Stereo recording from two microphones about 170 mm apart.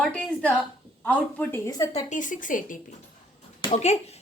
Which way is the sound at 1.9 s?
45° left (ahead or behind).